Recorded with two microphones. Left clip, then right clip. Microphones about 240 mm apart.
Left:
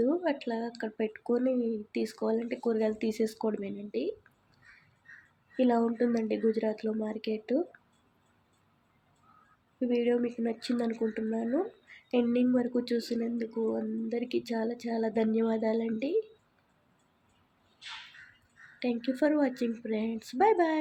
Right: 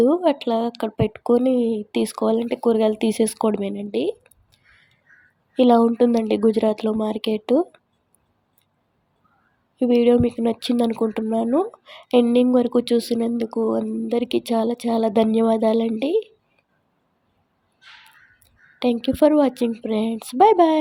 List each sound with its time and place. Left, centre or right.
0.0 s speech: right
5.5 s speech: right
9.8 s speech: right
18.8 s a woman's voice: right